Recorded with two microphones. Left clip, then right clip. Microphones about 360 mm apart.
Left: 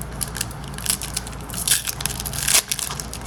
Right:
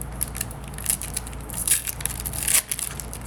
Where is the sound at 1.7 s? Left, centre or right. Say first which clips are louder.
Left 6 dB; centre.